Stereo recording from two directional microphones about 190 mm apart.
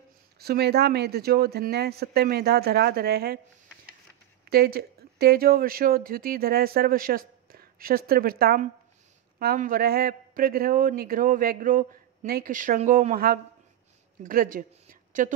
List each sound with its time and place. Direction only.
0.4 s speech: 55° right (ahead or behind)
4.5 s a woman's voice: 55° right (ahead or behind)